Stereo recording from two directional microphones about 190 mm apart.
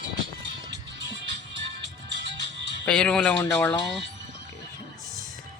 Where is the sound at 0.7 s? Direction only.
65° right (ahead or behind).